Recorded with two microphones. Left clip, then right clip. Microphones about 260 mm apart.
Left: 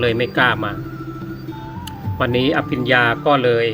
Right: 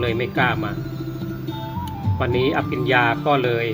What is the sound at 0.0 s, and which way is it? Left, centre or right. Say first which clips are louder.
Speech: left 5 dB; left.